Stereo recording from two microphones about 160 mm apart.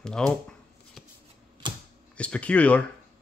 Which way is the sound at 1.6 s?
30° right (ahead or behind).